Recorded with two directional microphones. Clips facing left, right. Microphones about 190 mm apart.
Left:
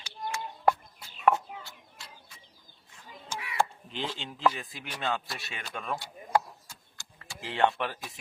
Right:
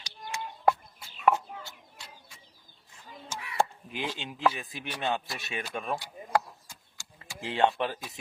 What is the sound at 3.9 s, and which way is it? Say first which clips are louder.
Speech: right 2 dB; 15° right (ahead or behind).